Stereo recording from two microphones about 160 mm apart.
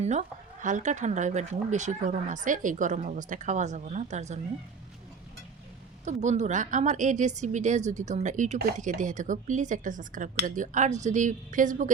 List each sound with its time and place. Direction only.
0.0 s speech: 50° right (ahead or behind)
6.1 s speech: 45° right (ahead or behind)